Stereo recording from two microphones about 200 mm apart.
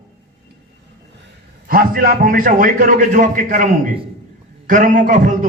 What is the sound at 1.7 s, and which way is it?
A man's voice, 45° right (ahead or behind).